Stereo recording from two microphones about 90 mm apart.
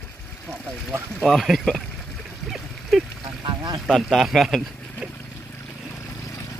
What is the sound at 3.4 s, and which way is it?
Boat, 55° right (ahead or behind).